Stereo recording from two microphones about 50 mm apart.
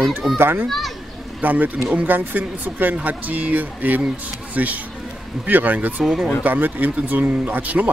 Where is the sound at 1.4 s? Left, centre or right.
Right.